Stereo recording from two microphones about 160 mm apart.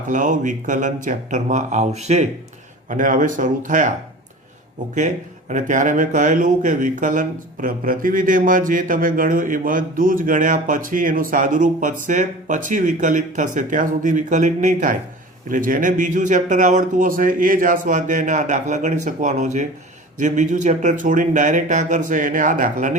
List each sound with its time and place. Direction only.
0.1 s speech: 55° right (ahead or behind)
2.9 s speech: 55° right (ahead or behind)
4.9 s speech: 50° right (ahead or behind)